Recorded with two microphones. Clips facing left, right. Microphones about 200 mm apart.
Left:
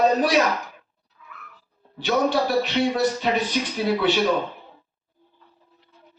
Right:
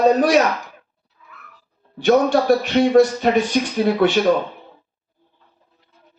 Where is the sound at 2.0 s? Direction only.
50° right (ahead or behind).